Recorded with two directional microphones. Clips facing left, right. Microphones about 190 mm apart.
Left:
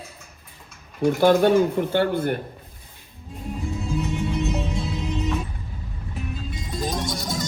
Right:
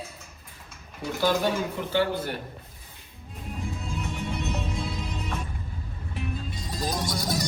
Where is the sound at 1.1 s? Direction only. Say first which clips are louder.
Left 8 dB; 55° left (ahead or behind).